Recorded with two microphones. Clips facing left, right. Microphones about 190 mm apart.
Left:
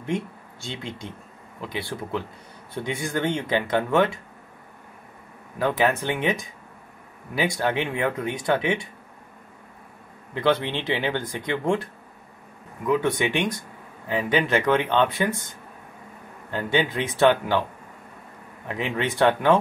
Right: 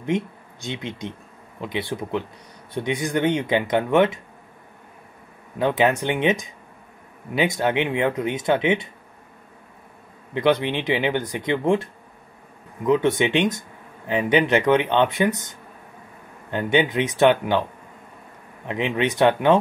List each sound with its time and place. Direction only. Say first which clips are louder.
0.0 s speech: right 4 dB; 20° right (ahead or behind)
5.6 s speech: right 3 dB; 20° right (ahead or behind)
10.3 s speech: right 3 dB; 15° right (ahead or behind)
18.7 s speech: right 4 dB; 20° right (ahead or behind)